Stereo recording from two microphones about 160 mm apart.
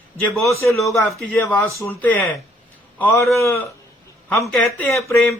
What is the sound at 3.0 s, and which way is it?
Speech, 5° left (ahead or behind).